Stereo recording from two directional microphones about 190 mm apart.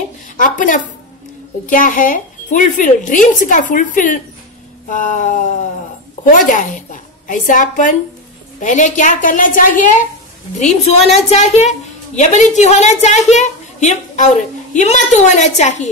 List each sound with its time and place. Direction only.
0.4 s a woman's voice: 45° left (ahead or behind)